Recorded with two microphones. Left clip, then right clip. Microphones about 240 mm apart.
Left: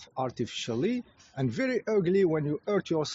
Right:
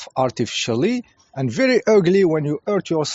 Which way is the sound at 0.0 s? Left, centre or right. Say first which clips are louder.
Right 12 dB; right.